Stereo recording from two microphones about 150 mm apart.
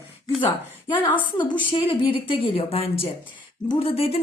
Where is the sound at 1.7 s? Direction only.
35° left (ahead or behind).